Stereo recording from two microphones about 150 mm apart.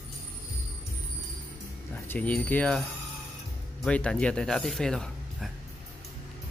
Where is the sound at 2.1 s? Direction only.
10° left (ahead or behind).